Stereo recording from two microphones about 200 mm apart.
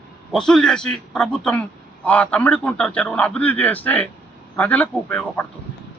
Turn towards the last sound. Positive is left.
turn(degrees=5)  # may be behind; listen again after turning